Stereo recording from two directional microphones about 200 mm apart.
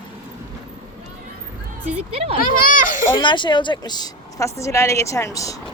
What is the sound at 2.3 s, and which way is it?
Speech, 40° left (ahead or behind).